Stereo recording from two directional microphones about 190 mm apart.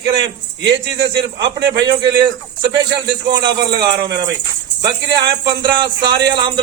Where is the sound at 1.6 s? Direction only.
70° right (ahead or behind).